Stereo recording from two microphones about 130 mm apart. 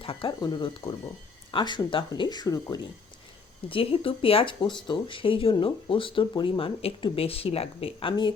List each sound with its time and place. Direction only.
0.0 s speech: 45° left (ahead or behind); by 2.9 s 30° left (ahead or behind)
3.7 s speech: 45° left (ahead or behind)